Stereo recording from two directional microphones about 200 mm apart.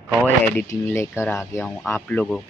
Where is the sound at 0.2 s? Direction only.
10° left (ahead or behind).